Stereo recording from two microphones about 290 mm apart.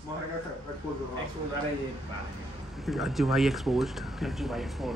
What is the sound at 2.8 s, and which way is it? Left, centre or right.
Speech, centre.